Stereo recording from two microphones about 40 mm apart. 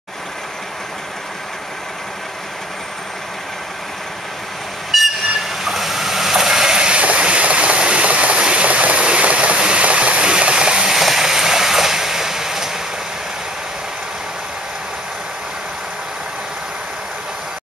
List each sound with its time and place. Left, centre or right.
4.9 s train: centre
7.0 s a sound: right
11.0 s train: centre